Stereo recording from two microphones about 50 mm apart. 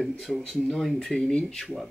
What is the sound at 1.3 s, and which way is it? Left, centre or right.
Speech, centre.